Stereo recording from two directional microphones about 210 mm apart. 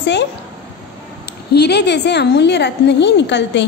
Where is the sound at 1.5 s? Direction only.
50° left (ahead or behind).